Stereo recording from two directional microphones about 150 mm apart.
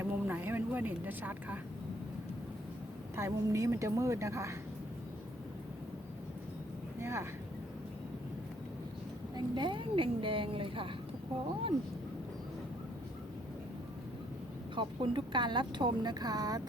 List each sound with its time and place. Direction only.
0.0 s vehicle: 15° right (ahead or behind)
3.2 s a woman's voice: 20° right (ahead or behind)
7.0 s speech: 20° right (ahead or behind)
9.3 s a woman's voice: 30° right (ahead or behind)
14.8 s a woman's voice: 30° right (ahead or behind)